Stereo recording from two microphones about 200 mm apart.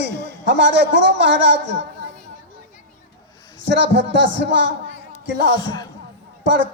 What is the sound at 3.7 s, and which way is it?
Speech, 65° right (ahead or behind).